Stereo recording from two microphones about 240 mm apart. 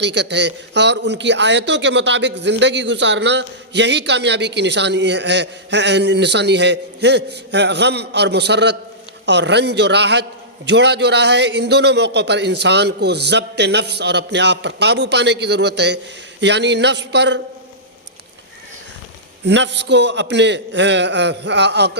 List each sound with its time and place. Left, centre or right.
0.0 s speech: right
19.5 s speech: right